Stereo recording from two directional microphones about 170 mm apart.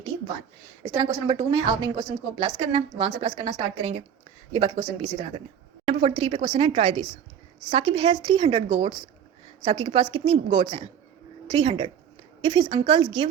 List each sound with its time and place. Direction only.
0.8 s a woman's voice: 25° right (ahead or behind)